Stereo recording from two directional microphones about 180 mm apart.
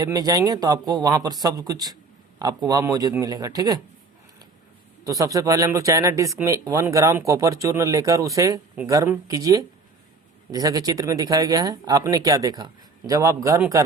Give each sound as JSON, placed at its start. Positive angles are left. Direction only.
{"t": 0.0, "sound": "speech", "side_deg": -20}
{"t": 5.0, "sound": "speech", "side_deg": -20}